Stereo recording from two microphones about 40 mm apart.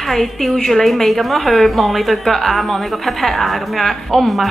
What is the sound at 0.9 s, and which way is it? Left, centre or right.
A woman's voice, centre.